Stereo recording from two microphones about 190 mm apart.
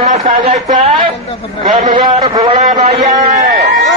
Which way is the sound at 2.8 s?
40° right (ahead or behind).